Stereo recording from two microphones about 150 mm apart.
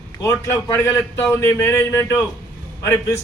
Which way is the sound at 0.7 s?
15° left (ahead or behind).